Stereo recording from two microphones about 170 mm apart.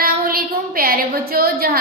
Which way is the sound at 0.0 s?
60° right (ahead or behind).